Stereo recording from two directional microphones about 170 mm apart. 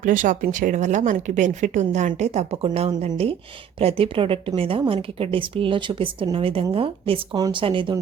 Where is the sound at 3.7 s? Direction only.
35° right (ahead or behind).